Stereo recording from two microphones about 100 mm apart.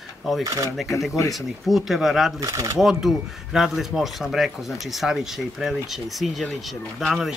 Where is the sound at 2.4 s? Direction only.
35° right (ahead or behind).